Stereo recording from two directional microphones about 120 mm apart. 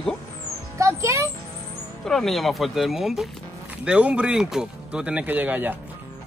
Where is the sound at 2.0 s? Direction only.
5° left (ahead or behind); by 5.8 s 15° right (ahead or behind).